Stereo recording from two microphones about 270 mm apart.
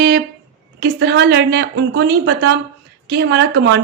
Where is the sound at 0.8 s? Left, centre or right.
Right.